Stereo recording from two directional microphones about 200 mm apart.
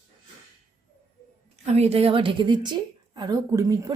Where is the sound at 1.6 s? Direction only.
30° right (ahead or behind).